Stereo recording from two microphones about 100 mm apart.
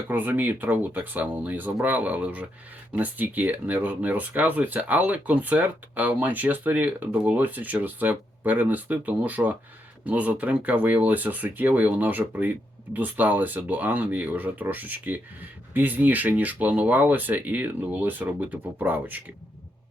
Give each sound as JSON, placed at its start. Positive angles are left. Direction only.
{"t": 0.1, "sound": "speech", "side_deg": -15}